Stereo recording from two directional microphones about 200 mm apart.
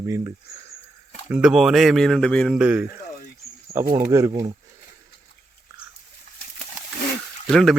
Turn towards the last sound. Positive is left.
turn(degrees=0)  # may be behind; listen again after turning